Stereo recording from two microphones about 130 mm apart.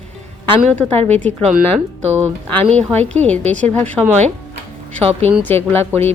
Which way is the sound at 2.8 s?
10° left (ahead or behind).